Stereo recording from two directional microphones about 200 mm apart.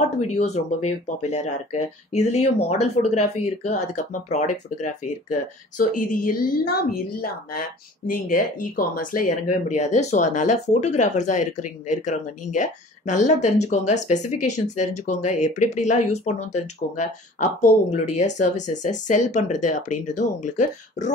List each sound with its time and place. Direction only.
0.2 s speech: 35° left (ahead or behind)